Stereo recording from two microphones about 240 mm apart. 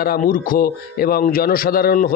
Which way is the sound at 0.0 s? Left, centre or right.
Left.